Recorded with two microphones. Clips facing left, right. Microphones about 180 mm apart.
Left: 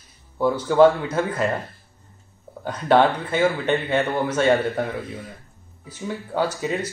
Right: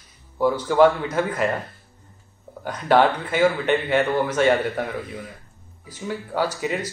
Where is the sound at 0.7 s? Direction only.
15° right (ahead or behind).